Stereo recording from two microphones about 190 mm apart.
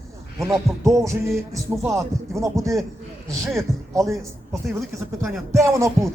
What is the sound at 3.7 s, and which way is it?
Speech, centre (ahead or behind).